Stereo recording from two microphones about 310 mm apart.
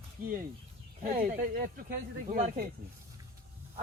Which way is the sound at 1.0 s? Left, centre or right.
Right.